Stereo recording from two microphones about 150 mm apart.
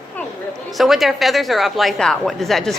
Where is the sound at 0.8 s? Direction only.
Centre (ahead or behind).